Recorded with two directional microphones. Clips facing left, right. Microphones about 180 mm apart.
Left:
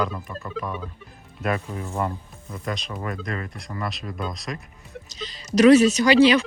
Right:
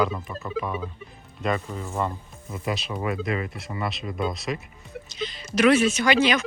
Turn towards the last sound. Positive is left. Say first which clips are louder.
# left 5 dB
turn(degrees=35)  # may be behind; listen again after turning